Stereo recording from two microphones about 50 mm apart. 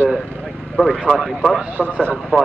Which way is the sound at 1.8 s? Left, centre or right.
Left.